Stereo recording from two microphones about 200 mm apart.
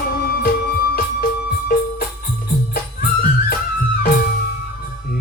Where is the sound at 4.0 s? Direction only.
45° left (ahead or behind).